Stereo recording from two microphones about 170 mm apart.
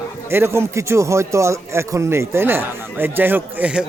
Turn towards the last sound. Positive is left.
turn(degrees=-10)  # may be behind; listen again after turning